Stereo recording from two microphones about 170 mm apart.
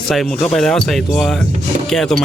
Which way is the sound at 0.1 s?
Centre (ahead or behind).